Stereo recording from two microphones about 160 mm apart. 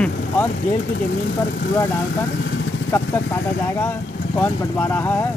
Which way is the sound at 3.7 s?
15° left (ahead or behind).